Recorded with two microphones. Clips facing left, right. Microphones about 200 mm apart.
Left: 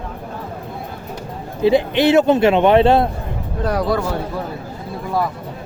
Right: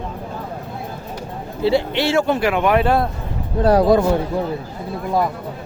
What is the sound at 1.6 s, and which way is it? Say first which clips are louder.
A man's voice: left 4 dB; 15° left (ahead or behind).